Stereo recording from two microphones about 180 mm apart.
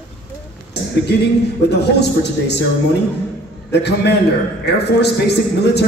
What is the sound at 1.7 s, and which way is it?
Speech, 70° left (ahead or behind).